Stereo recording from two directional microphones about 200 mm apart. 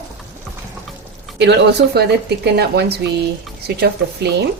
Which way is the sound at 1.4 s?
60° right (ahead or behind).